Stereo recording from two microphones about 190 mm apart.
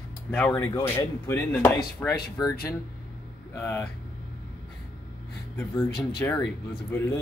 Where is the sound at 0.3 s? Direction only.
5° left (ahead or behind).